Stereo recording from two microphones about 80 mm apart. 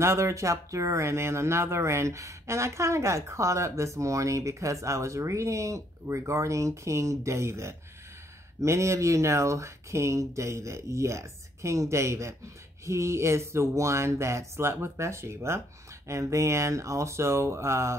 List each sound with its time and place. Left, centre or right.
0.0 s speech: right